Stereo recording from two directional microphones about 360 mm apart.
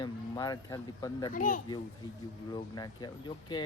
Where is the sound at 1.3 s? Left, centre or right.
Left.